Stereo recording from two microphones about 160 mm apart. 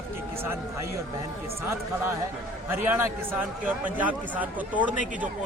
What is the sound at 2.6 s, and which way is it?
Speech, 15° right (ahead or behind).